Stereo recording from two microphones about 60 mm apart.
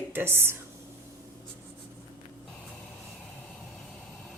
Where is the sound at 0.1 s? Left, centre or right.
Right.